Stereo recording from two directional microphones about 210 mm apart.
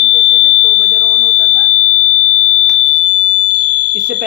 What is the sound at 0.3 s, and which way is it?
Smoke detector, 60° right (ahead or behind).